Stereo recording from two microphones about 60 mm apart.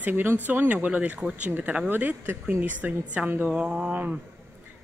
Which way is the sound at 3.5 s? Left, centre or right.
Centre.